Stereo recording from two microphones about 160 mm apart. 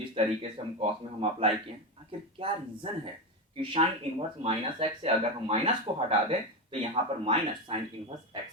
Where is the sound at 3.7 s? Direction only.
40° right (ahead or behind).